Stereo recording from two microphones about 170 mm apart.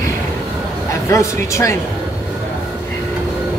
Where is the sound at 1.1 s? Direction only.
15° left (ahead or behind).